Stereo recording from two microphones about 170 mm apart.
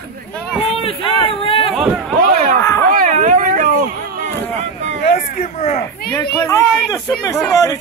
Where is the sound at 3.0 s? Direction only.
50° right (ahead or behind).